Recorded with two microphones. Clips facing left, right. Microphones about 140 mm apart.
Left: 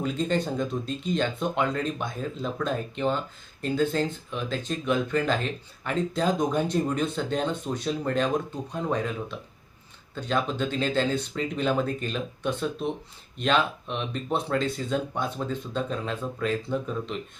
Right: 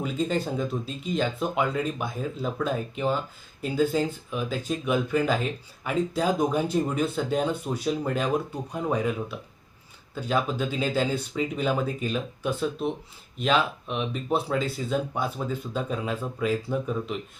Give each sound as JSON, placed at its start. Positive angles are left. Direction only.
{"t": 0.0, "sound": "speech", "side_deg": -5}